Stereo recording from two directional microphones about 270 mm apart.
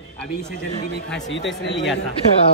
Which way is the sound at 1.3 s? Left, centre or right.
Left.